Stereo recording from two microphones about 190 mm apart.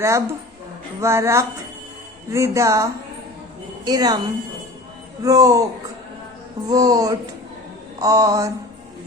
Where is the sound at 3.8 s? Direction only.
20° right (ahead or behind).